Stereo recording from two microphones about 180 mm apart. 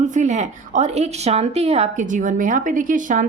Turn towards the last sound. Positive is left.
turn(degrees=-45)  # may be behind; listen again after turning